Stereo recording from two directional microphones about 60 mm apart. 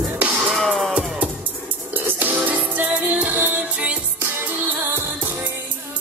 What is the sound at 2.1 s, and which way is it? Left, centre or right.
Music, right.